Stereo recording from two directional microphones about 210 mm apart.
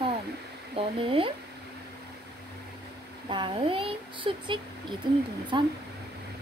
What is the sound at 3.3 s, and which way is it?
Speech, 25° right (ahead or behind).